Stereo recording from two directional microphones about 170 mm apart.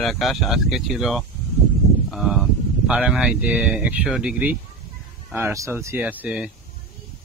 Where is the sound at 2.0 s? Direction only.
Centre (ahead or behind).